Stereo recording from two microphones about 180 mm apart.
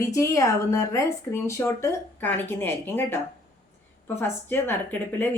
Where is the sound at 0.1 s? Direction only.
15° left (ahead or behind).